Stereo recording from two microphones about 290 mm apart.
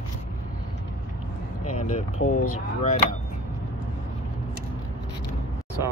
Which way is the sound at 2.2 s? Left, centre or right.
Left.